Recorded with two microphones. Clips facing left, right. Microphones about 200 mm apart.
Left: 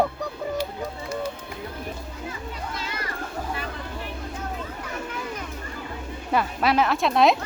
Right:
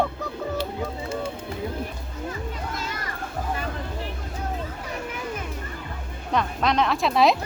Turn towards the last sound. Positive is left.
turn(degrees=0)  # may be behind; listen again after turning